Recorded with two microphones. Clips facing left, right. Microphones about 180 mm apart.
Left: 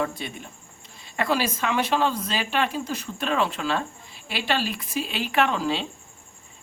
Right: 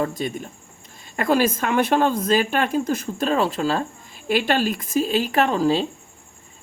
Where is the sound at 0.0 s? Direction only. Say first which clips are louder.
Right 4 dB; 40° right (ahead or behind).